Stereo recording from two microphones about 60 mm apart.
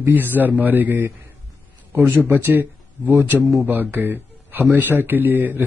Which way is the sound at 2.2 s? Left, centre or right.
Right.